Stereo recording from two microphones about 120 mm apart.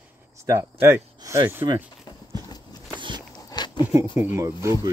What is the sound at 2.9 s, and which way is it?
Biting, 40° right (ahead or behind).